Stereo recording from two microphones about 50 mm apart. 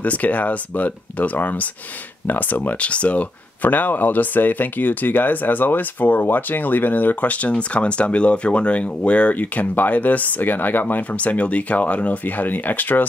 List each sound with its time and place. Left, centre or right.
0.0 s speech: left